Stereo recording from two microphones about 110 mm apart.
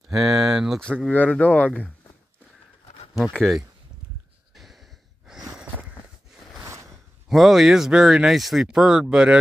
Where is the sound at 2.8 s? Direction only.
70° left (ahead or behind).